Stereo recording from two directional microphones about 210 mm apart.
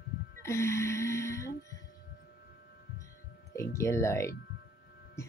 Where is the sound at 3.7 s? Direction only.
15° left (ahead or behind).